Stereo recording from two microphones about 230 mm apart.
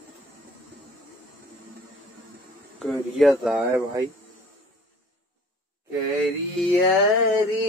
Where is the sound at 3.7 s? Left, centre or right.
Centre.